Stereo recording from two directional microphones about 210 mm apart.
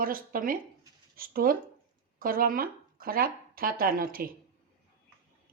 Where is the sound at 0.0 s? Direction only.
40° right (ahead or behind).